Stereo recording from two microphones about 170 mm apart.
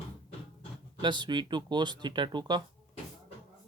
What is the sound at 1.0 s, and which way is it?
Speech, 25° right (ahead or behind).